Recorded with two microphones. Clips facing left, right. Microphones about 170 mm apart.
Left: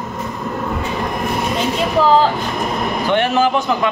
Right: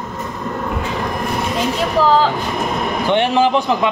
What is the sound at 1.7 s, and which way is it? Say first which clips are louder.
Speech: left 1 dB; centre (ahead or behind).